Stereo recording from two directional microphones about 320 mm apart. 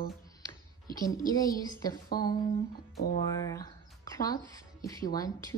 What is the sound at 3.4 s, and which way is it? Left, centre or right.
Speech, centre.